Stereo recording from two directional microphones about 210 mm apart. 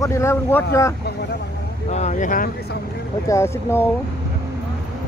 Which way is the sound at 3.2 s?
15° left (ahead or behind).